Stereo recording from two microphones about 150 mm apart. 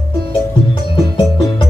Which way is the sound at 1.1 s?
35° left (ahead or behind).